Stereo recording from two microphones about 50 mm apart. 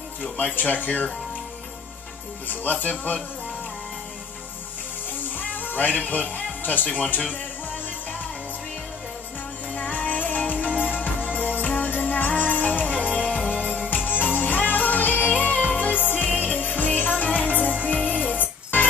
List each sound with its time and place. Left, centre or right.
0.6 s speech: left
2.4 s speech: left
5.5 s music: left
6.0 s speech: left
9.8 s music: left